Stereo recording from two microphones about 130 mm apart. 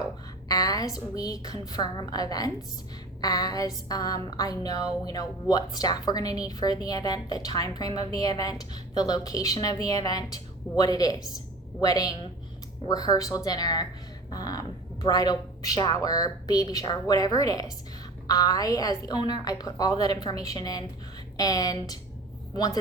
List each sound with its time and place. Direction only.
0.4 s a woman's voice: 30° left (ahead or behind)